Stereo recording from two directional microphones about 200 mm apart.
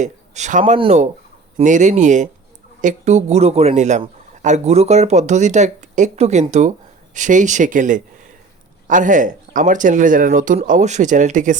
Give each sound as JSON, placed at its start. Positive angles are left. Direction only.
{"t": 0.0, "sound": "a man's voice", "side_deg": -35}